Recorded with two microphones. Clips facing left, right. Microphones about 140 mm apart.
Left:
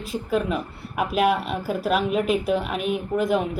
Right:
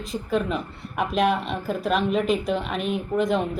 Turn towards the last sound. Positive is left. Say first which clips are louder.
# even
turn(degrees=5)  # may be behind; listen again after turning